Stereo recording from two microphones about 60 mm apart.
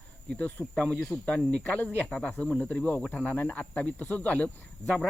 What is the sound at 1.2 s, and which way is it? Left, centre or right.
Speech, left.